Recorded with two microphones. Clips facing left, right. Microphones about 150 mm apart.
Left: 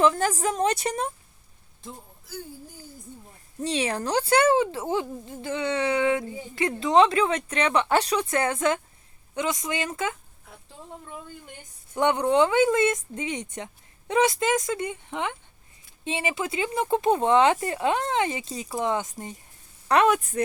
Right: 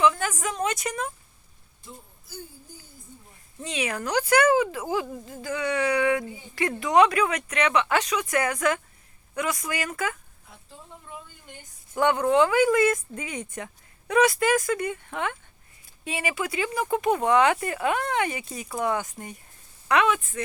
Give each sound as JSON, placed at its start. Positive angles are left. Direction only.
{"t": 0.0, "sound": "a woman's voice", "side_deg": 40}
{"t": 3.6, "sound": "speech", "side_deg": 35}
{"t": 11.9, "sound": "speech", "side_deg": 20}
{"t": 19.9, "sound": "a woman's voice", "side_deg": 40}